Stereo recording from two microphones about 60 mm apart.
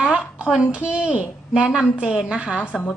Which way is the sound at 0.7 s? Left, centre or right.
Right.